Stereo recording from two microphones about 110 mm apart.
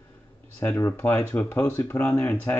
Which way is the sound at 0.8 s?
20° left (ahead or behind).